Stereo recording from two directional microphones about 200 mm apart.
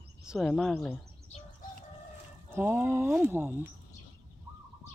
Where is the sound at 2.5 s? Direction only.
10° right (ahead or behind).